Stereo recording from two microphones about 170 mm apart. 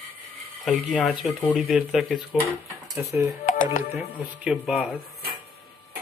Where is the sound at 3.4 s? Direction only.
50° left (ahead or behind).